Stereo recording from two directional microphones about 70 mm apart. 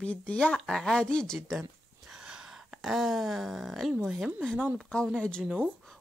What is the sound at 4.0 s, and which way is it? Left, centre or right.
Speech, centre.